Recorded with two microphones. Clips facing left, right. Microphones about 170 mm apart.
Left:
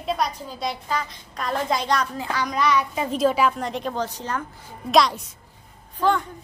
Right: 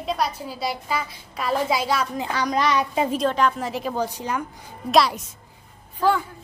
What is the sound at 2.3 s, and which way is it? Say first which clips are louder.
Speech: even; 35° right (ahead or behind).